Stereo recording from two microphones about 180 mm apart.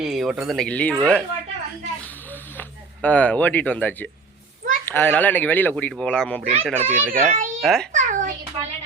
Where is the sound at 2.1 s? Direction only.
10° left (ahead or behind).